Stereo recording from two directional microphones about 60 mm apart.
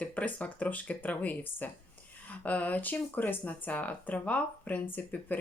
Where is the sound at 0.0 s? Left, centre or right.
Left.